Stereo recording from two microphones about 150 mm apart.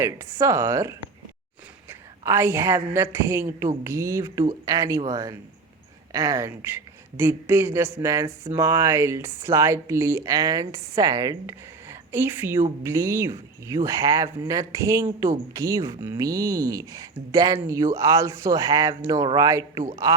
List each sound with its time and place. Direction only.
0.0 s a woman's voice: 20° right (ahead or behind)